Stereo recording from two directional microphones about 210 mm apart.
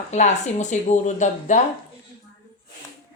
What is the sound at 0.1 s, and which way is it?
Speech, 35° left (ahead or behind).